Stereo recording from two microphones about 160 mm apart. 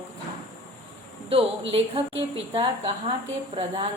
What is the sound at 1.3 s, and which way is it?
A woman's voice, 35° right (ahead or behind).